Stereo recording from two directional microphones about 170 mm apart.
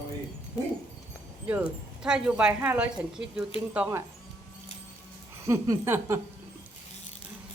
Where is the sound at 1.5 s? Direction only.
5° right (ahead or behind).